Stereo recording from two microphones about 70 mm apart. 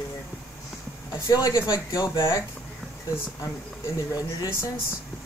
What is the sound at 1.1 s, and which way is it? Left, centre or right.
Speech, left.